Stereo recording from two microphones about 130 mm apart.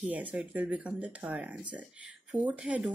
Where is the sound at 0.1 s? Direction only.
10° right (ahead or behind).